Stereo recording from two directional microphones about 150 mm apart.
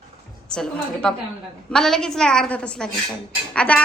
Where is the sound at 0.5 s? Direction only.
5° left (ahead or behind).